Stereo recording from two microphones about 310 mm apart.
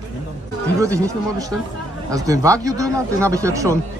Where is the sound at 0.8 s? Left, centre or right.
Centre.